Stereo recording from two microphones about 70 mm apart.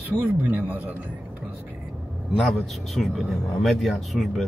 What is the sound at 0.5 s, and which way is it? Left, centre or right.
Speech, right.